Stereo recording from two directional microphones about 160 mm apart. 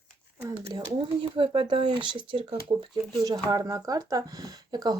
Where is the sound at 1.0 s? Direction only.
35° right (ahead or behind).